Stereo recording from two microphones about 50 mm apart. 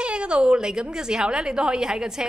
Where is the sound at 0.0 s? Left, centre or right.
Right.